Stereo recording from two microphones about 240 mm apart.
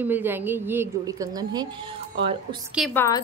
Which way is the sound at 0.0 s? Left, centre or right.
Centre.